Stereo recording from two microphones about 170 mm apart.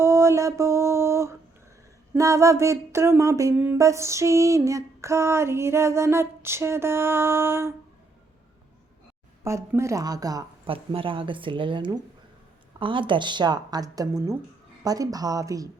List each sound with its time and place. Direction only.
0.0 s mantra: 15° right (ahead or behind)
2.1 s a sound: 20° right (ahead or behind)
9.4 s a woman's voice: 15° right (ahead or behind)
10.7 s a woman's voice: 30° right (ahead or behind)